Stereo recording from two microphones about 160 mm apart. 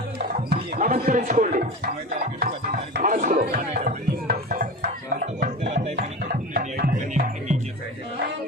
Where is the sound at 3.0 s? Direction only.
55° right (ahead or behind).